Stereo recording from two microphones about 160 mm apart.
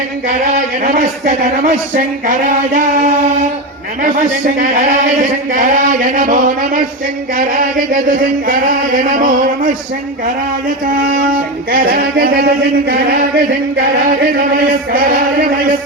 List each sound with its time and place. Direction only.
0.9 s speech: 55° right (ahead or behind)
5.5 s speech: 60° right (ahead or behind)
11.7 s speech: 65° right (ahead or behind)